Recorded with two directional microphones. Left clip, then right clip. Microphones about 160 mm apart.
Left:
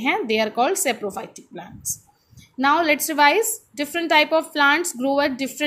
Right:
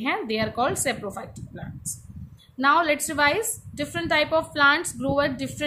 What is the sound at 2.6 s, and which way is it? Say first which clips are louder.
A woman's voice: left 2 dB; 20° left (ahead or behind).